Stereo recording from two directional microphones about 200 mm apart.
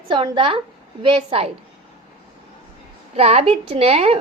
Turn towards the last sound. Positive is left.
turn(degrees=-30)  # may be behind; listen again after turning